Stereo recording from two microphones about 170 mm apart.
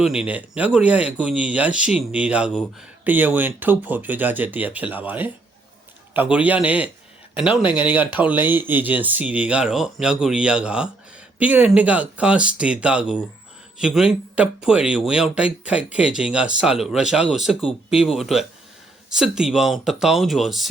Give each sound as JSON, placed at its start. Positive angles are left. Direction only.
{"t": 0.0, "sound": "speech", "side_deg": -5}
{"t": 7.6, "sound": "speech", "side_deg": 30}
{"t": 7.9, "sound": "speech", "side_deg": -10}